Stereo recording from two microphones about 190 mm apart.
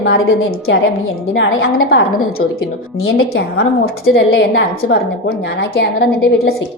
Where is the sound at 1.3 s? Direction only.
75° left (ahead or behind).